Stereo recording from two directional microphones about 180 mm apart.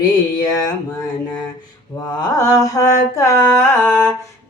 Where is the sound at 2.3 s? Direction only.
20° left (ahead or behind).